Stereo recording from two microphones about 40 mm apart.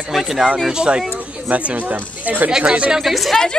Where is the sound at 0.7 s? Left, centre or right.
Centre.